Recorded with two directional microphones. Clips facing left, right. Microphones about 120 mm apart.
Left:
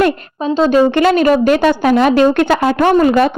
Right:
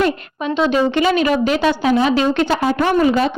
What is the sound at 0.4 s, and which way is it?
A woman's voice, 35° left (ahead or behind).